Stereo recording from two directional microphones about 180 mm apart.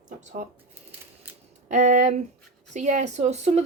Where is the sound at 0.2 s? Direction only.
40° right (ahead or behind).